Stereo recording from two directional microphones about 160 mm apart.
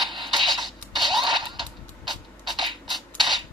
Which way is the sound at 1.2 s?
30° right (ahead or behind).